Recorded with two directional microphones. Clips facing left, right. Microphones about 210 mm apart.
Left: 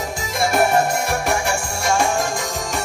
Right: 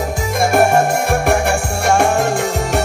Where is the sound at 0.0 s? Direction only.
55° right (ahead or behind).